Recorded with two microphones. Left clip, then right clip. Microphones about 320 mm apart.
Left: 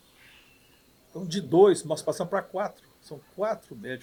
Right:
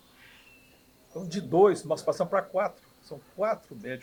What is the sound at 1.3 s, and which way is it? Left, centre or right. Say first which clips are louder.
Speech: left 2 dB; left.